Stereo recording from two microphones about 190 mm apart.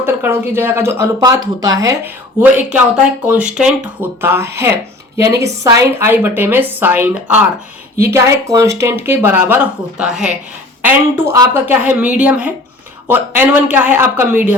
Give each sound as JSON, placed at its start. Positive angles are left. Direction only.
{"t": 0.0, "sound": "speech", "side_deg": -10}
{"t": 2.4, "sound": "speech", "side_deg": -5}